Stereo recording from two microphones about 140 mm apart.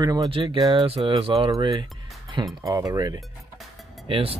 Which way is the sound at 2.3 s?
25° right (ahead or behind).